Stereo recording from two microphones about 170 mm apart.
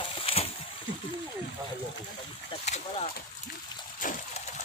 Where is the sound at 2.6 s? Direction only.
40° left (ahead or behind).